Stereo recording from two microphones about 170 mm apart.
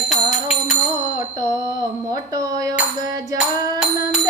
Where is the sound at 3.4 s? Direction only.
5° right (ahead or behind).